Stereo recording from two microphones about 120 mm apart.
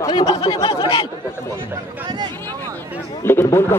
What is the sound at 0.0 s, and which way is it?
A man's voice, 35° left (ahead or behind).